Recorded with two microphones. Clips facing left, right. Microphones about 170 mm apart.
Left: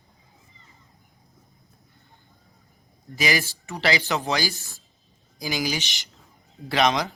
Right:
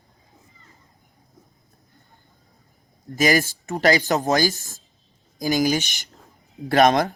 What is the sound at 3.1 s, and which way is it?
Speech, 45° right (ahead or behind).